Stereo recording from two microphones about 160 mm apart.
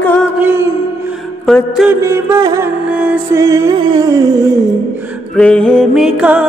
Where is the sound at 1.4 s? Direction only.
Centre (ahead or behind).